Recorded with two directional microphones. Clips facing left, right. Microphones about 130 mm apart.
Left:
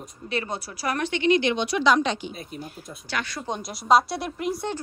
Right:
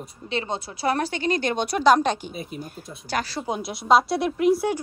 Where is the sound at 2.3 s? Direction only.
5° right (ahead or behind).